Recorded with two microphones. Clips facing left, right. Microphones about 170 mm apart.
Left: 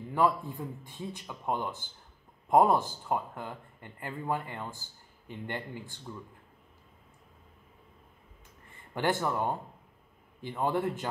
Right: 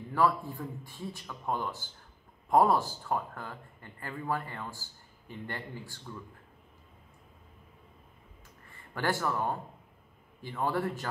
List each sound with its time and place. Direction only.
0.1 s speech: 20° left (ahead or behind)
8.9 s speech: 20° left (ahead or behind)